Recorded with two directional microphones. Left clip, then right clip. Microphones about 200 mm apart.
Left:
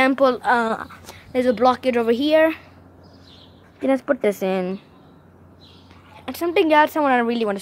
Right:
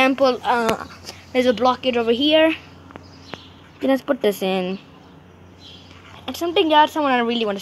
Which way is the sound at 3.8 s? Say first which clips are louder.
Even; 10° left (ahead or behind).